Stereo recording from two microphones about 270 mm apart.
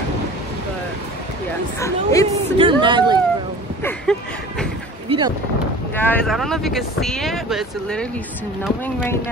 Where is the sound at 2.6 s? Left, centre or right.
Centre.